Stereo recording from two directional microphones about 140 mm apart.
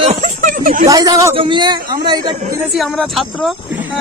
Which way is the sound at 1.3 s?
35° right (ahead or behind).